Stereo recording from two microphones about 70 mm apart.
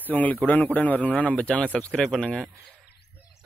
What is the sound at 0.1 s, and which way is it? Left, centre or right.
A man's voice, left.